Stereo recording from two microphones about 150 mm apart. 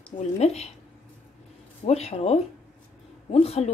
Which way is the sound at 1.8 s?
45° left (ahead or behind).